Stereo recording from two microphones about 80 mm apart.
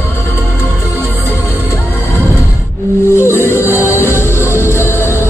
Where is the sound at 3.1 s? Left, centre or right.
Left.